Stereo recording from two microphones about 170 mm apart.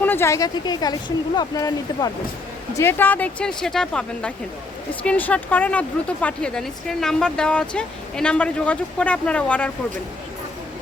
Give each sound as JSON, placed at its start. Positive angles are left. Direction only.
{"t": 0.0, "sound": "speech", "side_deg": 15}
{"t": 2.7, "sound": "speech", "side_deg": 10}